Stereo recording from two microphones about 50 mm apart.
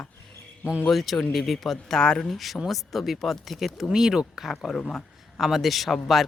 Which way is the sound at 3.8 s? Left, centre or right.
Centre.